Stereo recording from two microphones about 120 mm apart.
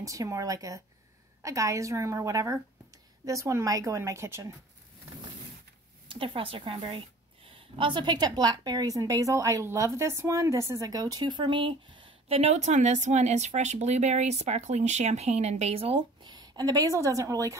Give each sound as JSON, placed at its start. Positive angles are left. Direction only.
{"t": 0.0, "sound": "a woman's voice", "side_deg": -30}
{"t": 6.0, "sound": "a woman's voice", "side_deg": -45}